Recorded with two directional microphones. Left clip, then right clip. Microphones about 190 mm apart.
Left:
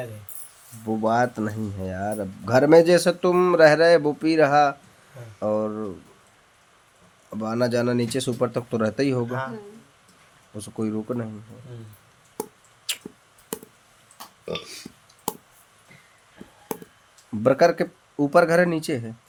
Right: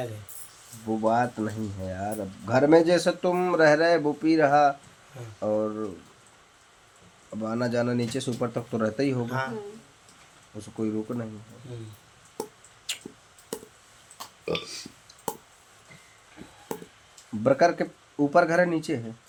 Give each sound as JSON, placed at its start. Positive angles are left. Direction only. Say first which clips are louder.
{"t": 0.9, "sound": "speech", "louder": "left 3 dB", "side_deg": 55}
{"t": 7.4, "sound": "speech", "louder": "left 4 dB", "side_deg": 50}
{"t": 10.6, "sound": "speech", "louder": "left 1 dB", "side_deg": 50}
{"t": 12.4, "sound": "a sound", "louder": "left 2 dB", "side_deg": 50}
{"t": 17.4, "sound": "speech", "louder": "left 3 dB", "side_deg": 50}